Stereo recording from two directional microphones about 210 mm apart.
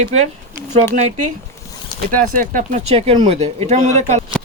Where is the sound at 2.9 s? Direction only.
30° right (ahead or behind).